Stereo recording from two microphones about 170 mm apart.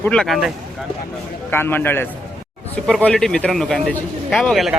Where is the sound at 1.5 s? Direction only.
10° left (ahead or behind).